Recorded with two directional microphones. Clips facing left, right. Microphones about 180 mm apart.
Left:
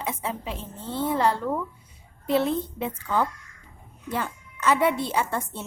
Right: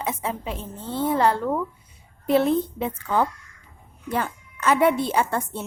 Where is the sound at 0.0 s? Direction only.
45° right (ahead or behind).